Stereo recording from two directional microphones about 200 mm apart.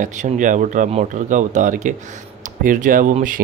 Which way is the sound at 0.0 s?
40° right (ahead or behind).